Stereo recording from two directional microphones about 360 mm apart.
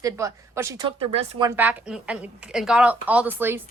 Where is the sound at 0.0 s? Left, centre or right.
Centre.